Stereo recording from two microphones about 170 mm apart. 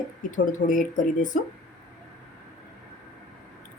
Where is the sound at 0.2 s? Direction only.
50° left (ahead or behind).